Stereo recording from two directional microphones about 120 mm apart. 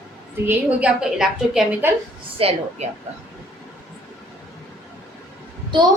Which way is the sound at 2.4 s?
55° right (ahead or behind).